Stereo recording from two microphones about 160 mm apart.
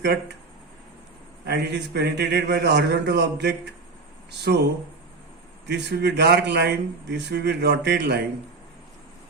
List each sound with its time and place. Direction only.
1.5 s speech: 90° right
5.6 s speech: 90° right